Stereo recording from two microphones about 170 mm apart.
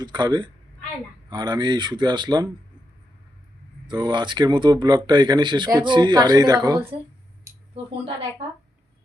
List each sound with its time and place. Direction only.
0.0 s speech: 25° right (ahead or behind)
3.8 s speech: 25° right (ahead or behind)